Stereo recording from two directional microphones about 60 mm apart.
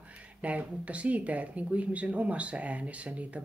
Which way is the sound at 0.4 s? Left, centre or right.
Right.